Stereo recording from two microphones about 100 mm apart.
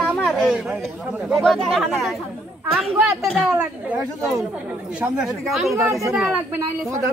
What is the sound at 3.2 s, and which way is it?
Speech, centre (ahead or behind).